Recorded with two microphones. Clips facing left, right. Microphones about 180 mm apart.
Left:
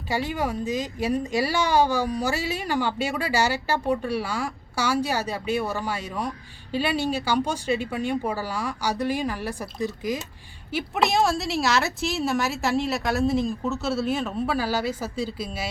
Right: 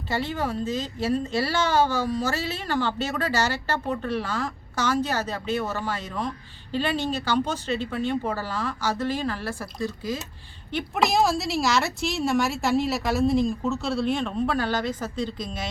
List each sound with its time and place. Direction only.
0.1 s speech: 15° left (ahead or behind)
10.7 s speech: 5° left (ahead or behind)